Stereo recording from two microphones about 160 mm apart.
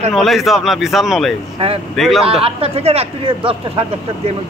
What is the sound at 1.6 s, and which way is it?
Speech, 40° right (ahead or behind).